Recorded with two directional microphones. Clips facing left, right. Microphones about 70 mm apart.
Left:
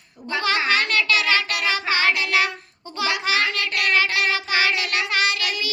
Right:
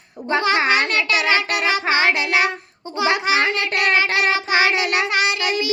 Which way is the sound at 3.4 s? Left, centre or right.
Right.